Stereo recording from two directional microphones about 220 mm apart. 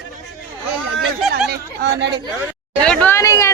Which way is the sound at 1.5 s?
50° right (ahead or behind).